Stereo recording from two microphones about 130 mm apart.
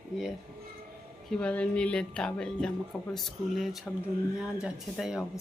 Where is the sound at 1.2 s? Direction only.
10° left (ahead or behind).